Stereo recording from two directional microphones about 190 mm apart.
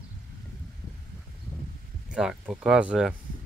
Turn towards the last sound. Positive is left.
turn(degrees=-5)  # may be behind; listen again after turning